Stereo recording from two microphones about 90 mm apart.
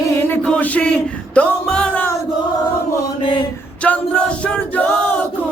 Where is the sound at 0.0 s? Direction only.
25° left (ahead or behind).